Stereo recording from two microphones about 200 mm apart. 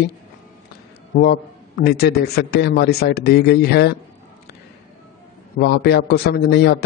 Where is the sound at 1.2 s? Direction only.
50° left (ahead or behind).